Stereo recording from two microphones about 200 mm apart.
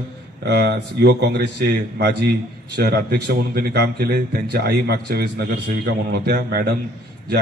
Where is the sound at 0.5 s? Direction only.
55° right (ahead or behind).